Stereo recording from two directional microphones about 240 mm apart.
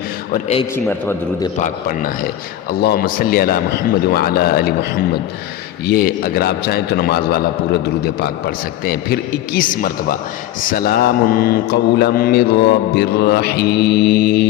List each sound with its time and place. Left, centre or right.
0.9 s a man's voice: centre
1.5 s mantra: left
5.8 s mantra: left